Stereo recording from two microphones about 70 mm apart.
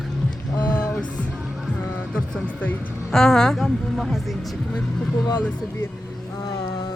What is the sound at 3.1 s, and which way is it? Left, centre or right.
Speech, centre.